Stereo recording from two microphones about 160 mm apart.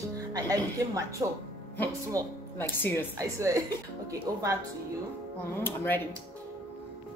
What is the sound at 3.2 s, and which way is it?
A woman's voice, 20° right (ahead or behind).